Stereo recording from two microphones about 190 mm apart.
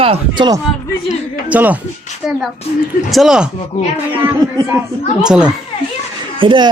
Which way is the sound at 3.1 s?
Centre (ahead or behind).